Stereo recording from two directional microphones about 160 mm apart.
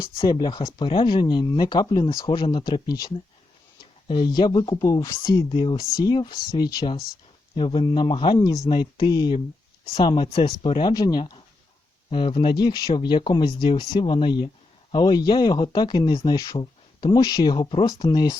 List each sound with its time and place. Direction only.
0.1 s speech: 30° left (ahead or behind)
4.1 s speech: 25° left (ahead or behind)